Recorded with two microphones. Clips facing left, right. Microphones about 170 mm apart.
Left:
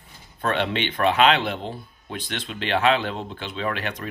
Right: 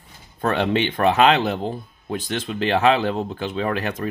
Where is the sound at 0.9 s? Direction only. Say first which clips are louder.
Right 1 dB; 40° right (ahead or behind).